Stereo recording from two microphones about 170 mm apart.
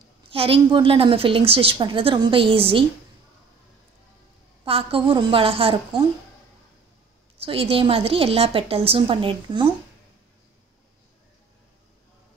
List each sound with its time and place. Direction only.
0.3 s a woman's voice: 35° right (ahead or behind)
4.6 s a woman's voice: 35° right (ahead or behind)
7.3 s a woman's voice: 35° right (ahead or behind)